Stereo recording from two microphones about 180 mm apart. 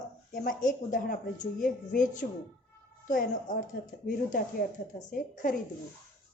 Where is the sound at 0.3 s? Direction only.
50° left (ahead or behind).